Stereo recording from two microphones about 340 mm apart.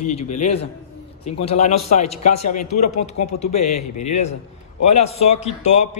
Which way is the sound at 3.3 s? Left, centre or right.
Centre.